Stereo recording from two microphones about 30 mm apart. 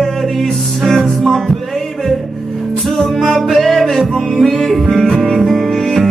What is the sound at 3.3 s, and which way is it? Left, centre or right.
Music, centre.